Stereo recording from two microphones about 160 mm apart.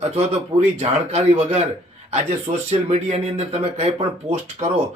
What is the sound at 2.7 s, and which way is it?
Speech, 40° right (ahead or behind).